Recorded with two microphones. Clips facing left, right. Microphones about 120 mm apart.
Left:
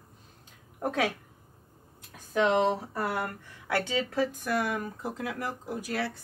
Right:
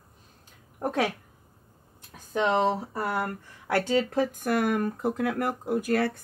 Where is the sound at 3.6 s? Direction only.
40° right (ahead or behind).